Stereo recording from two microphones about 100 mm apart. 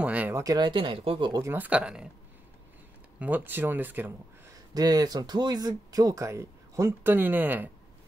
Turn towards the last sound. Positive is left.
turn(degrees=-20)  # may be behind; listen again after turning